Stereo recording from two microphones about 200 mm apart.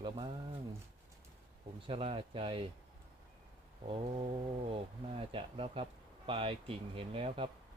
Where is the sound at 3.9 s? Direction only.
25° right (ahead or behind).